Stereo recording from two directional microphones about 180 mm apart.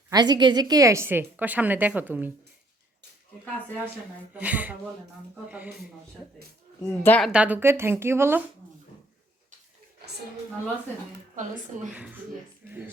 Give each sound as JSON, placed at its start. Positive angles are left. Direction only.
{"t": 0.1, "sound": "a woman's voice", "side_deg": -25}
{"t": 4.4, "sound": "a woman's voice", "side_deg": -10}
{"t": 6.8, "sound": "speech", "side_deg": 10}
{"t": 7.3, "sound": "a woman's voice", "side_deg": -5}
{"t": 11.3, "sound": "speech", "side_deg": -45}
{"t": 11.9, "sound": "speech", "side_deg": -5}